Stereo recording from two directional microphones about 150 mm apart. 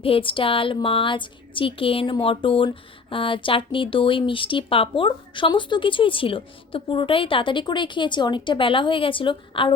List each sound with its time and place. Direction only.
0.0 s speech: 35° left (ahead or behind)